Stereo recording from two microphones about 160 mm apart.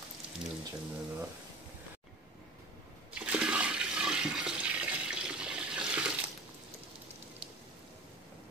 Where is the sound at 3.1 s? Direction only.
5° right (ahead or behind).